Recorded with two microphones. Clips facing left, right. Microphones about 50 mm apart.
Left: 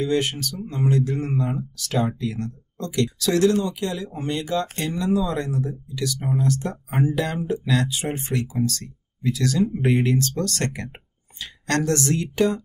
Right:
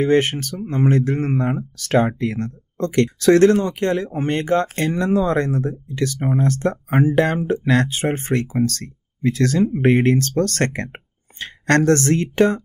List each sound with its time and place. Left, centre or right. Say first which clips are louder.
0.0 s speech: right 6 dB; right